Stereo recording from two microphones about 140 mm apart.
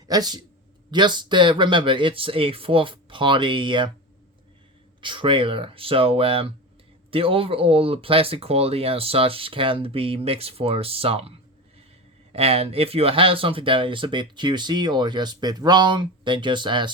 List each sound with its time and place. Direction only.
0.1 s speech: 30° right (ahead or behind)
4.9 s speech: 35° right (ahead or behind)